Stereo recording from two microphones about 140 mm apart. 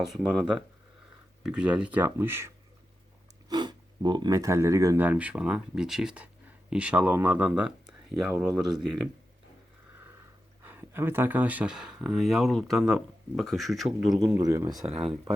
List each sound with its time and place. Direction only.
0.0 s speech: 5° right (ahead or behind)
3.5 s speech: 30° right (ahead or behind)
5.0 s speech: 10° right (ahead or behind)
10.6 s speech: 15° right (ahead or behind); by 14.3 s centre (ahead or behind)
14.3 s speech: 20° right (ahead or behind)
14.8 s speech: 45° right (ahead or behind)